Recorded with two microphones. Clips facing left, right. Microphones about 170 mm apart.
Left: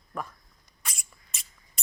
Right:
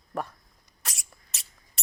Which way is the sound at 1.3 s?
75° right (ahead or behind).